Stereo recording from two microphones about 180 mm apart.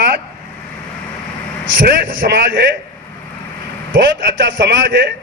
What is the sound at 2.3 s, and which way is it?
Speech, 70° right (ahead or behind).